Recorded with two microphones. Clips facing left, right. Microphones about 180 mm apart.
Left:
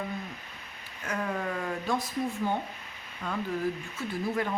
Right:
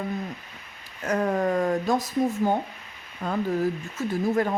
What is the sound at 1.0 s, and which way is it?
Speech, 40° right (ahead or behind).